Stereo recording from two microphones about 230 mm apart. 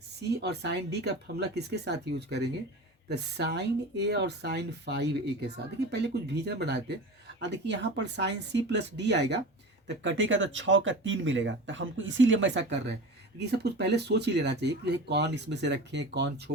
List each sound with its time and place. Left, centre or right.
0.2 s speech: right